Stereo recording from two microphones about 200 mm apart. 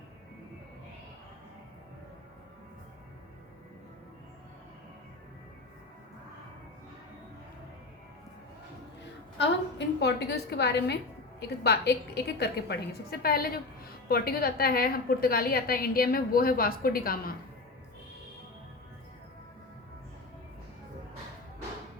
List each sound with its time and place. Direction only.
9.4 s a woman's voice: 60° left (ahead or behind)